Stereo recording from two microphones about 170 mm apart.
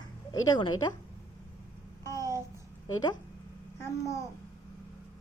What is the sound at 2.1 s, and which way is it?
Babbling, 20° left (ahead or behind).